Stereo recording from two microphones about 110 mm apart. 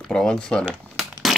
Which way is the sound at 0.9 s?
Centre (ahead or behind).